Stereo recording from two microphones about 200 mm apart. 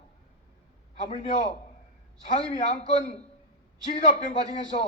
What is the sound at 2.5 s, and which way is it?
A man's voice, 30° left (ahead or behind).